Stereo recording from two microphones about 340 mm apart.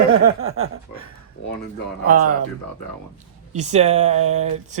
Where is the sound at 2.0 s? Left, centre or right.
Right.